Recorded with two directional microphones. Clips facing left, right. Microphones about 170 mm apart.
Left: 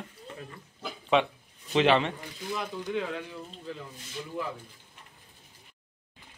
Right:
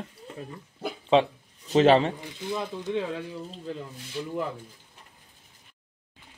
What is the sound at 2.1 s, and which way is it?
Speech, 25° right (ahead or behind).